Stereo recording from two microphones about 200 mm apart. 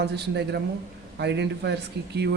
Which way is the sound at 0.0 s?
55° right (ahead or behind).